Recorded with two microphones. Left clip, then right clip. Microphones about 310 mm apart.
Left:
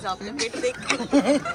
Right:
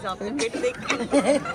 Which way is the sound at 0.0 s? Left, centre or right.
Centre.